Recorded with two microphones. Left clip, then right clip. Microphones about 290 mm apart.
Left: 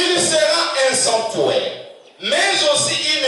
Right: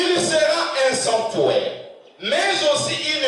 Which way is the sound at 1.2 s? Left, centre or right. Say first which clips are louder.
Left 1 dB; right.